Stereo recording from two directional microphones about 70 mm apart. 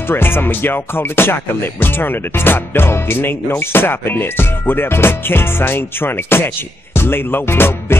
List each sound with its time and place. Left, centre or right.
0.1 s music: left